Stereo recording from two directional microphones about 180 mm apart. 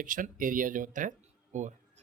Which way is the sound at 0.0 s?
50° right (ahead or behind).